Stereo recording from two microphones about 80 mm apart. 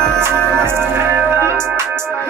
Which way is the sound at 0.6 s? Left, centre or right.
Right.